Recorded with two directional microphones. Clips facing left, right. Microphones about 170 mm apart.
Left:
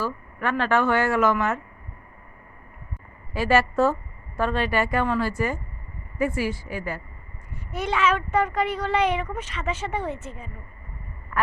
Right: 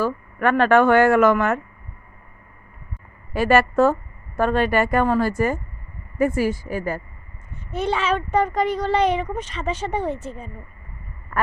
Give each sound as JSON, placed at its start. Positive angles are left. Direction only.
{"t": 0.0, "sound": "speech", "side_deg": -55}
{"t": 3.3, "sound": "a woman's voice", "side_deg": -55}
{"t": 7.7, "sound": "speech", "side_deg": -30}